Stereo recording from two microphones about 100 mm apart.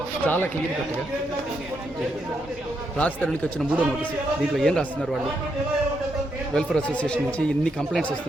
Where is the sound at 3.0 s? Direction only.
15° left (ahead or behind).